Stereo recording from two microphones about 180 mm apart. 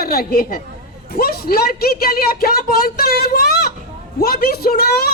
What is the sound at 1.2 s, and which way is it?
A woman's voice, 55° left (ahead or behind).